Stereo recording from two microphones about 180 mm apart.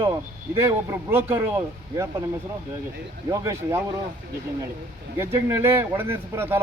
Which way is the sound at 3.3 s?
15° right (ahead or behind).